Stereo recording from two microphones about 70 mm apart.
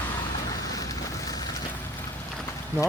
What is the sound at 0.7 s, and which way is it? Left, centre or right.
Vehicle, left.